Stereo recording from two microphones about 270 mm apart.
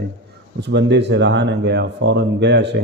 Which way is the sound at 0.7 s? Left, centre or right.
Right.